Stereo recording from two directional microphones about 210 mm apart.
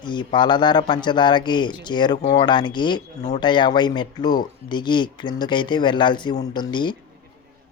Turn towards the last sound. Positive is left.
turn(degrees=20)  # may be behind; listen again after turning